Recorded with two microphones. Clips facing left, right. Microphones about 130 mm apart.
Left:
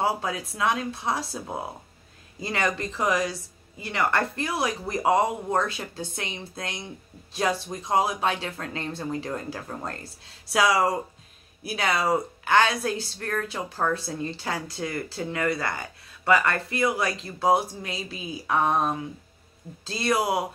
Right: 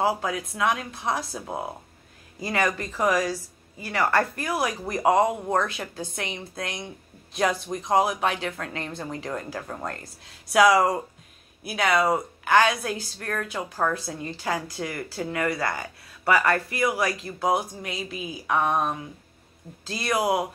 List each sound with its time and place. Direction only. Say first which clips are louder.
0.0 s speech: right 2 dB; 30° left (ahead or behind)
2.4 s a woman's voice: right 1 dB; 25° left (ahead or behind)